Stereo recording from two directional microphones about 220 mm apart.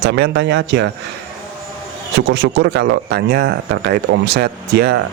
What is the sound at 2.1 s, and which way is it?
Speech, 50° right (ahead or behind).